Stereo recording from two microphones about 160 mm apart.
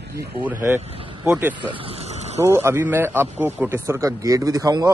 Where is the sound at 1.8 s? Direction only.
40° right (ahead or behind).